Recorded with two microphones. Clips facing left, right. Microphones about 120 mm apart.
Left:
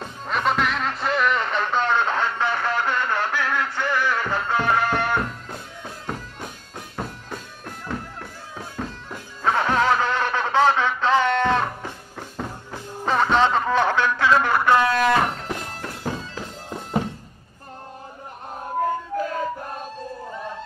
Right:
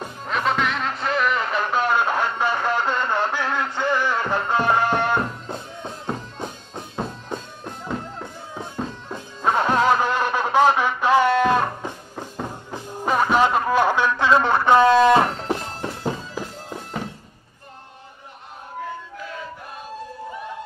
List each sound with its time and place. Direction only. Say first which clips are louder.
0.3 s music: even; centre (ahead or behind); by 15.9 s 30° right (ahead or behind)
16.0 s bagpipes: right 1 dB; 20° right (ahead or behind)
18.8 s a sound: left 9 dB; 45° left (ahead or behind)